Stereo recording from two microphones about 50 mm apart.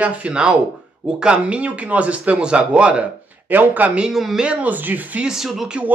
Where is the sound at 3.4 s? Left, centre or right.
Right.